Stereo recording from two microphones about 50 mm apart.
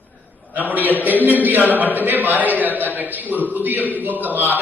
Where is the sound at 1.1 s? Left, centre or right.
Left.